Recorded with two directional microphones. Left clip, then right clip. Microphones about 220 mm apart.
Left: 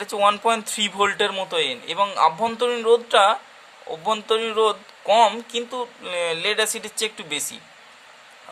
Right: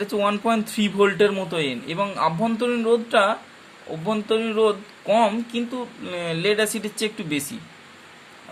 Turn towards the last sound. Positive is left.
turn(degrees=20)  # may be behind; listen again after turning